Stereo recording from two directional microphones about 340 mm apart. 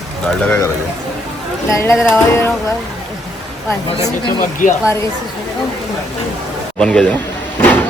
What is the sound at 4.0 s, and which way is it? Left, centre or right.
Speech, left.